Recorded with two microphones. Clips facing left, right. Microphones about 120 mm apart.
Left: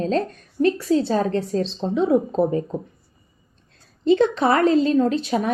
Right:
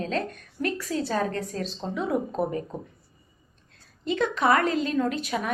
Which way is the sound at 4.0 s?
30° left (ahead or behind).